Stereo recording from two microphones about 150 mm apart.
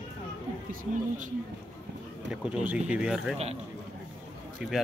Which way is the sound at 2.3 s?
5° right (ahead or behind).